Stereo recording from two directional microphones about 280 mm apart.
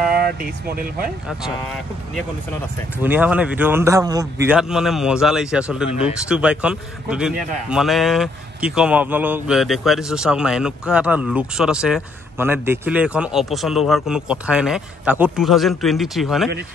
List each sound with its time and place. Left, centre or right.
0.1 s speech: right
3.0 s speech: centre
4.6 s a man's voice: centre